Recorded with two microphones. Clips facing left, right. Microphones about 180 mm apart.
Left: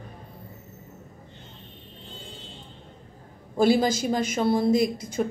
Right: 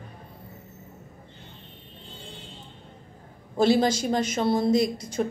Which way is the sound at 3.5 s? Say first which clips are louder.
Even; 10° left (ahead or behind).